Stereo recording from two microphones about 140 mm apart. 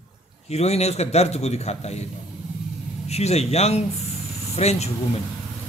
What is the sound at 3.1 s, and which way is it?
A man's voice, 50° left (ahead or behind).